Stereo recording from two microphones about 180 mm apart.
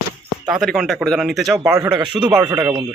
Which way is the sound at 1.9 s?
25° right (ahead or behind).